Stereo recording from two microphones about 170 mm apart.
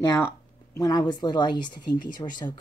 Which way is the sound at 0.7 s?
20° left (ahead or behind).